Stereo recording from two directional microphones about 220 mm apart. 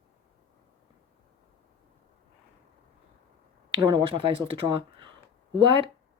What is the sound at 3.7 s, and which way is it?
Speech, 25° right (ahead or behind).